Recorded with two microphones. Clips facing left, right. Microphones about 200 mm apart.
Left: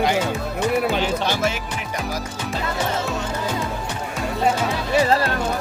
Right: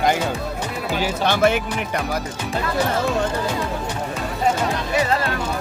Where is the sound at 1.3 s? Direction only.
60° right (ahead or behind).